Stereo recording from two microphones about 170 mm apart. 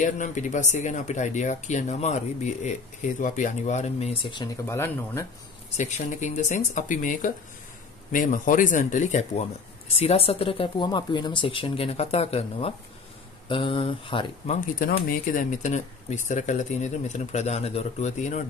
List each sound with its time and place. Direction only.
0.0 s speech: 45° left (ahead or behind); by 4.6 s 25° left (ahead or behind)
4.6 s speech: 15° left (ahead or behind)
5.8 s speech: 45° left (ahead or behind)
9.9 s speech: 35° left (ahead or behind)
14.5 s speech: 60° left (ahead or behind)